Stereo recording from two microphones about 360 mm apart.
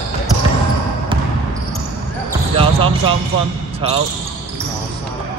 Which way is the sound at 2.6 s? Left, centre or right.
Centre.